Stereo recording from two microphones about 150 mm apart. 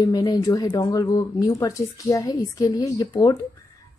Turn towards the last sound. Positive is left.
turn(degrees=25)  # may be behind; listen again after turning